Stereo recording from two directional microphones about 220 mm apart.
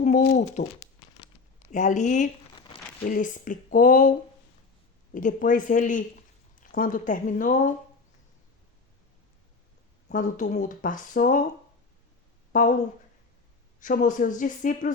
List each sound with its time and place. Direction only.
0.0 s speech: 35° left (ahead or behind)
1.7 s speech: 35° left (ahead or behind)
5.1 s speech: 35° left (ahead or behind)
10.1 s speech: 35° left (ahead or behind)
12.5 s speech: 35° left (ahead or behind)
13.7 s speech: 35° left (ahead or behind)